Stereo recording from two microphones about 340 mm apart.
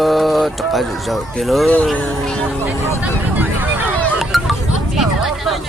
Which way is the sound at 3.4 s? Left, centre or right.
Centre.